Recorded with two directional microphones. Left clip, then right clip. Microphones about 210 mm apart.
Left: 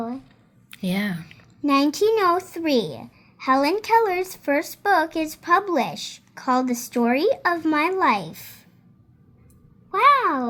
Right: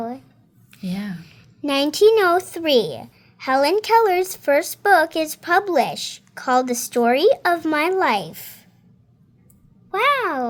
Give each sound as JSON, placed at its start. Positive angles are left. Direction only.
{"t": 0.7, "sound": "speech", "side_deg": 35}
{"t": 1.2, "sound": "speech", "side_deg": -15}
{"t": 9.9, "sound": "a child's voice", "side_deg": -15}